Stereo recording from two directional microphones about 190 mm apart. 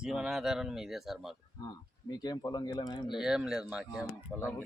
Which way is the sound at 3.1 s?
Centre (ahead or behind).